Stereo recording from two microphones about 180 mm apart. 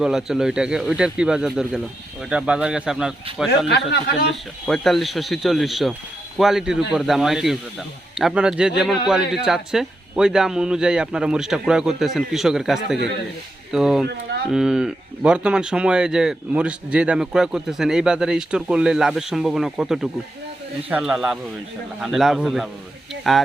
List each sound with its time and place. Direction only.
0.0 s speech: 5° right (ahead or behind)
3.7 s speech: 65° left (ahead or behind)
4.6 s speech: centre (ahead or behind)